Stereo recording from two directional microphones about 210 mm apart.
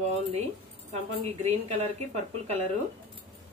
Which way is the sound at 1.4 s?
30° right (ahead or behind).